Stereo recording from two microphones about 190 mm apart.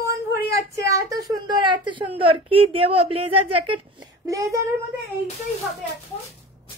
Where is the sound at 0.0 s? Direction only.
15° right (ahead or behind).